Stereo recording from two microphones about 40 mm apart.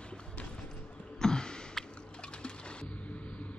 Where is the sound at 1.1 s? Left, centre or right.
Centre.